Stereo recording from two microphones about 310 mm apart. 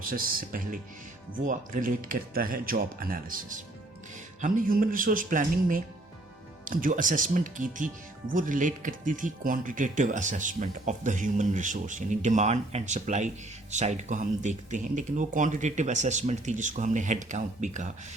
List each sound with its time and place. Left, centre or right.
0.0 s speech: right